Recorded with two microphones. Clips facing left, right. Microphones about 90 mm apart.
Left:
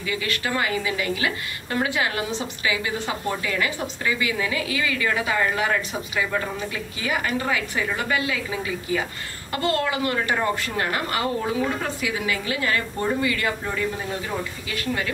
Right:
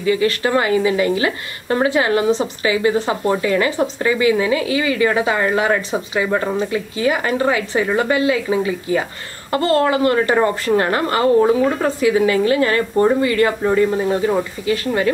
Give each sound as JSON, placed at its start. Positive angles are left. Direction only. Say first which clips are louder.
{"t": 0.0, "sound": "speech", "louder": "right 10 dB", "side_deg": -35}